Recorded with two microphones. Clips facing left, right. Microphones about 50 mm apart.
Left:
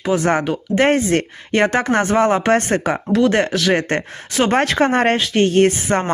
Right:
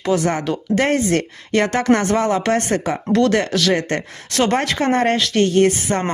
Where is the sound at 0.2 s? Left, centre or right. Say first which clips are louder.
Left 2 dB; left.